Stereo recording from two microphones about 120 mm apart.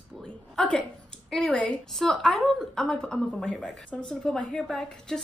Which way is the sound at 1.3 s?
5° left (ahead or behind).